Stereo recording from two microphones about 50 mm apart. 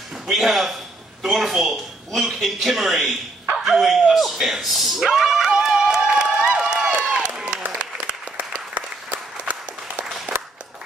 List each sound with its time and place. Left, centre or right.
0.3 s speech: centre
7.0 s applause: centre
10.3 s applause: right